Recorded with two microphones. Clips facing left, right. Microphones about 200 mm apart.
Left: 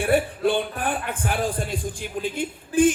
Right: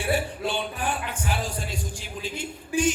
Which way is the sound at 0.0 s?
55° left (ahead or behind).